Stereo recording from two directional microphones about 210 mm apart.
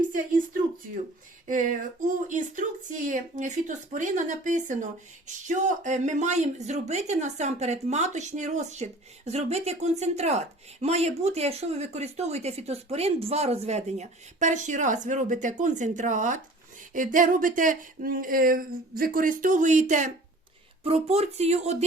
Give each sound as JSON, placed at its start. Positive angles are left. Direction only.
{"t": 0.1, "sound": "a woman's voice", "side_deg": -40}